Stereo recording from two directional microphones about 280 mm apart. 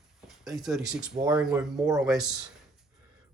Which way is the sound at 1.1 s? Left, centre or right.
Centre.